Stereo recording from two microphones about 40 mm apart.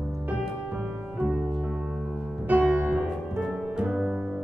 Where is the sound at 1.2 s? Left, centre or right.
Right.